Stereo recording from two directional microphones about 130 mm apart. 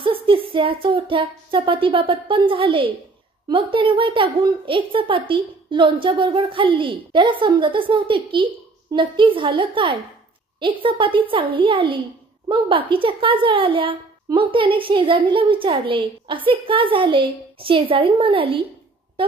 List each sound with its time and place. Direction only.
0.0 s a woman's voice: 40° right (ahead or behind)